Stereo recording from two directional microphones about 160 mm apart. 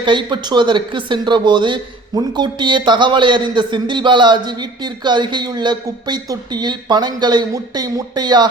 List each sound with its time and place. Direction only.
0.0 s speech: 30° right (ahead or behind)